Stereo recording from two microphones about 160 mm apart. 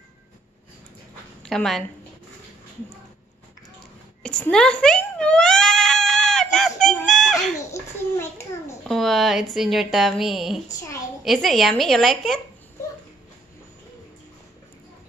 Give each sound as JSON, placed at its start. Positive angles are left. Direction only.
{"t": 1.4, "sound": "a woman's voice", "side_deg": 5}
{"t": 4.2, "sound": "cat", "side_deg": 5}
{"t": 7.7, "sound": "a sound", "side_deg": 15}
{"t": 8.8, "sound": "speech", "side_deg": 0}
{"t": 10.7, "sound": "a sound", "side_deg": 20}
{"t": 11.2, "sound": "speech", "side_deg": 0}